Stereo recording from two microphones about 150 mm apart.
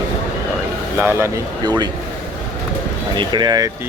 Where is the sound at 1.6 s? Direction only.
30° right (ahead or behind).